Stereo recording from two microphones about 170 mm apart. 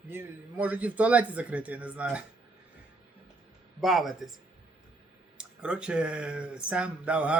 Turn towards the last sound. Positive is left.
turn(degrees=-5)  # may be behind; listen again after turning